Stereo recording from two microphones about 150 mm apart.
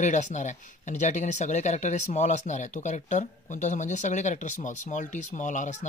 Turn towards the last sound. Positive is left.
turn(degrees=55)  # may be behind; listen again after turning